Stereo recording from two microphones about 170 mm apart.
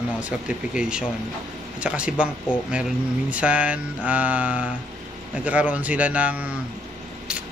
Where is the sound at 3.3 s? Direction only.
5° right (ahead or behind).